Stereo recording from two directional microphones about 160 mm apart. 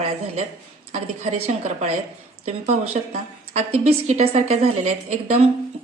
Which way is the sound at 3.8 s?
40° right (ahead or behind).